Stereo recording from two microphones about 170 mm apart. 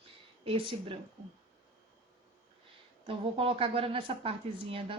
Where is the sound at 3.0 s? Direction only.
30° right (ahead or behind).